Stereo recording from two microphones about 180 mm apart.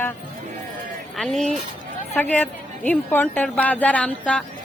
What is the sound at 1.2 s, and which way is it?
A woman's voice, centre (ahead or behind).